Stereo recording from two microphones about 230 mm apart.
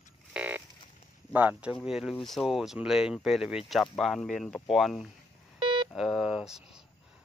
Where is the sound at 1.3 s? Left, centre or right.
Centre.